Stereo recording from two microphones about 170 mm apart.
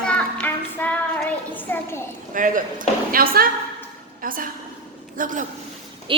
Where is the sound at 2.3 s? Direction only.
50° right (ahead or behind).